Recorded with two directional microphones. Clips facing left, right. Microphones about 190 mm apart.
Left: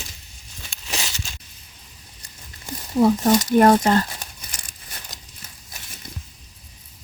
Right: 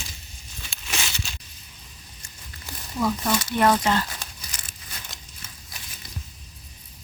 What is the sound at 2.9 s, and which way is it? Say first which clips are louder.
Speech: left 8 dB; 40° left (ahead or behind).